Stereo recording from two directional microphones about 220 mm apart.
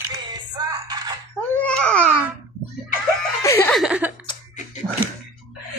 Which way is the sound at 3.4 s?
10° left (ahead or behind).